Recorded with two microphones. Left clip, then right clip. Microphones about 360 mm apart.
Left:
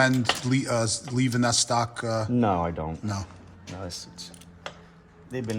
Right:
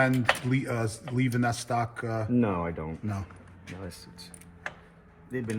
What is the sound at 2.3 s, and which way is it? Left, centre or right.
Speech, left.